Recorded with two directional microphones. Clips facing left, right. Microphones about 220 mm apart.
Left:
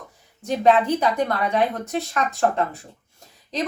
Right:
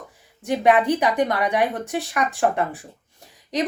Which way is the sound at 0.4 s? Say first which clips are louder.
Even; 15° right (ahead or behind).